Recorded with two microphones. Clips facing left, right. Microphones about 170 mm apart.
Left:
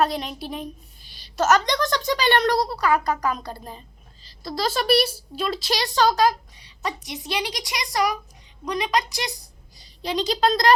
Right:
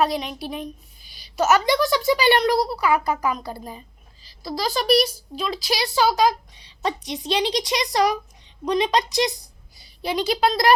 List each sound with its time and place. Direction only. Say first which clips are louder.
0.0 s a woman's voice: right 1 dB; centre (ahead or behind); by 9.3 s 20° right (ahead or behind)
10.0 s speech: right 1 dB; 10° right (ahead or behind)